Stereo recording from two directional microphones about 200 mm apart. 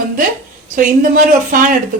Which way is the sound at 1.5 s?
40° right (ahead or behind).